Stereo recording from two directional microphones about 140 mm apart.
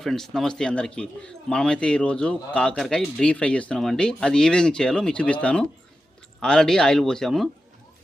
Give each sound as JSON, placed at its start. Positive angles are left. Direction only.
{"t": 0.0, "sound": "speech", "side_deg": 0}